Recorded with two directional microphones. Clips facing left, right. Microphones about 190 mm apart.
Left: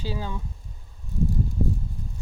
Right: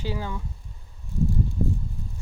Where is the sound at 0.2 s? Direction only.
15° left (ahead or behind).